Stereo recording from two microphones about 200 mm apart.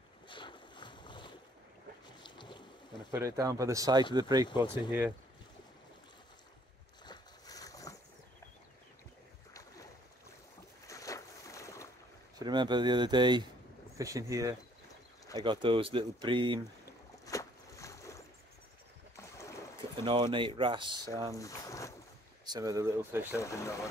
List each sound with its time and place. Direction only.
0.3 s boat: 25° left (ahead or behind)
3.1 s speech: 15° right (ahead or behind)
4.5 s speech: 25° left (ahead or behind)
7.1 s boat: 20° left (ahead or behind)
9.5 s boat: 15° left (ahead or behind)
10.9 s a sound: 15° left (ahead or behind)
12.4 s speech: 20° right (ahead or behind)
16.8 s boat: 15° left (ahead or behind)
20.0 s speech: 25° right (ahead or behind)
21.4 s boat: 15° left (ahead or behind)
22.5 s speech: 15° right (ahead or behind)
23.3 s speech: 15° left (ahead or behind)